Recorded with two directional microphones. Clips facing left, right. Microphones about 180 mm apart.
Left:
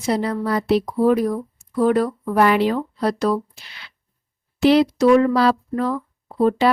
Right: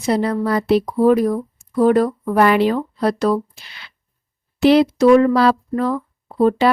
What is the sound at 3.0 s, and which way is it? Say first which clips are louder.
Speech: right 3 dB; 60° right (ahead or behind).